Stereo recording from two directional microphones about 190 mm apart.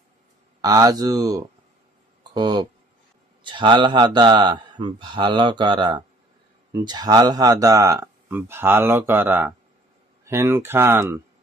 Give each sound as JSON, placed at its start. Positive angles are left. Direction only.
{"t": 0.6, "sound": "a man's voice", "side_deg": -20}